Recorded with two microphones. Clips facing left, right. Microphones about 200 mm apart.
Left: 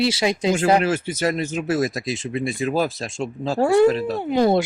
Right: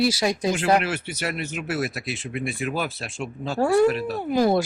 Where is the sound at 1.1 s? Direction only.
45° left (ahead or behind).